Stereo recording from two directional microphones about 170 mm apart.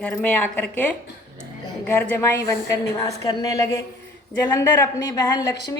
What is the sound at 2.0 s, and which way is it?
A woman's voice, 15° left (ahead or behind).